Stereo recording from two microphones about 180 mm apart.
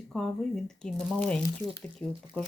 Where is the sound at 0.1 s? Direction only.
Centre (ahead or behind).